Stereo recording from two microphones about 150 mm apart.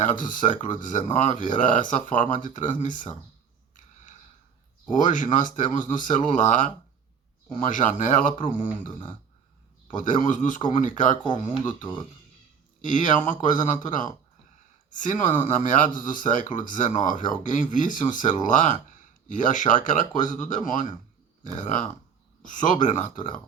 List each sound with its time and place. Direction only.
0.0 s speech: 60° left (ahead or behind)
4.9 s speech: 60° left (ahead or behind)
10.0 s speech: 60° left (ahead or behind)
12.8 s speech: 60° left (ahead or behind)